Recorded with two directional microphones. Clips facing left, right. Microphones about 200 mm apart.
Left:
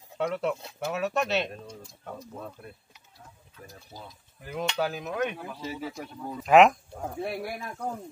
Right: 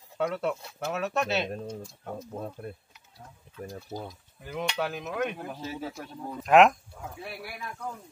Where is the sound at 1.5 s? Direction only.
45° right (ahead or behind).